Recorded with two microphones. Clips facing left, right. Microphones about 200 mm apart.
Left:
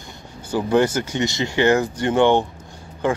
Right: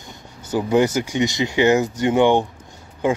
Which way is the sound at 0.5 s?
15° right (ahead or behind).